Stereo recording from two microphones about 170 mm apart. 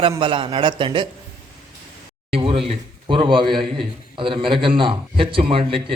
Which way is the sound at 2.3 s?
30° right (ahead or behind).